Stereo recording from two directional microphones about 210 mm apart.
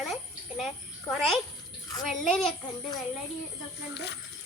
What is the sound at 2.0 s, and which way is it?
Speech, centre (ahead or behind).